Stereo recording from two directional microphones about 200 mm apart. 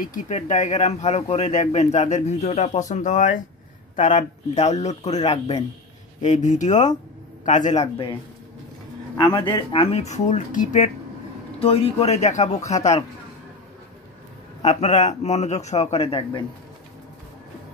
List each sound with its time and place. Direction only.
0.0 s speech: 40° left (ahead or behind)
14.6 s speech: 35° left (ahead or behind)